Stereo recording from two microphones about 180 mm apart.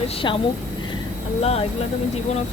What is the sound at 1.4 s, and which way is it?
Speech, 35° left (ahead or behind).